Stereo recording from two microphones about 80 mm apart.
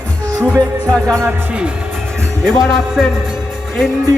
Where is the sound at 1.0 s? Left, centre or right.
Right.